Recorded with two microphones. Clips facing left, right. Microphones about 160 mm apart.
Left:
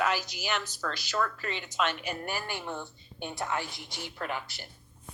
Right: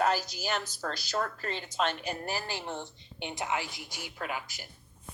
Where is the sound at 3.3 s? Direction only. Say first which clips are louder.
Even; 15° right (ahead or behind).